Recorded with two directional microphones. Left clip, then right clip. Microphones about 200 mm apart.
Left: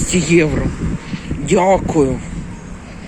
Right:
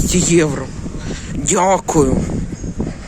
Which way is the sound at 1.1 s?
35° right (ahead or behind).